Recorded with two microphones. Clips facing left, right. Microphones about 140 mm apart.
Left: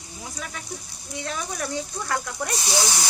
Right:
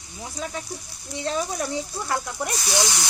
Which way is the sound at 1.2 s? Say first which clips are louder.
Right 5 dB; 25° right (ahead or behind).